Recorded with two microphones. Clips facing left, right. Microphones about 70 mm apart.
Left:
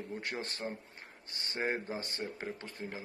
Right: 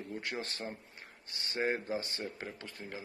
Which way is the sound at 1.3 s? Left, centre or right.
Left.